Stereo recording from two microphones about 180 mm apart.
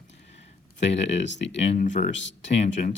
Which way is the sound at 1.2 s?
85° left.